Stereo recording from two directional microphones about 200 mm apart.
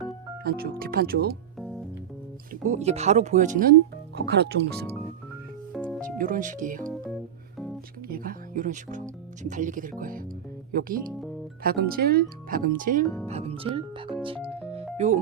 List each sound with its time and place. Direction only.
0.4 s speech: 50° right (ahead or behind)
2.5 s speech: 35° right (ahead or behind); by 4.9 s 55° right (ahead or behind)
5.7 s music: centre (ahead or behind)
6.0 s speech: 45° right (ahead or behind)
6.9 s music: centre (ahead or behind)
8.0 s speech: 45° right (ahead or behind)
13.2 s speech: 30° right (ahead or behind)